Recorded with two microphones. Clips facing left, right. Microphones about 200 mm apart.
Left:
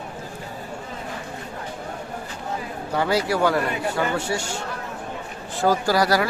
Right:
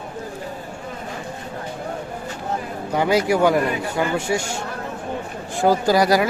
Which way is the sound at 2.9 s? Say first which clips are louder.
Right 4 dB; 15° right (ahead or behind).